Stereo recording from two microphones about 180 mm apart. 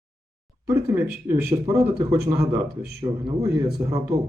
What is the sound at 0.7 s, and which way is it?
A man's voice, 15° right (ahead or behind).